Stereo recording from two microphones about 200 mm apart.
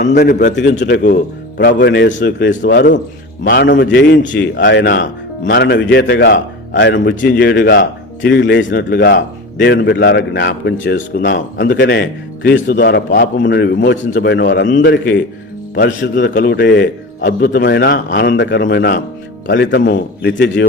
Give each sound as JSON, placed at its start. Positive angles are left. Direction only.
{"t": 0.1, "sound": "a man's voice", "side_deg": 50}
{"t": 0.5, "sound": "a man's voice", "side_deg": 60}